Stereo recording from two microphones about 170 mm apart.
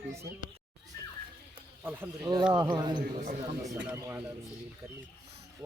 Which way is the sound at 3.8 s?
10° right (ahead or behind).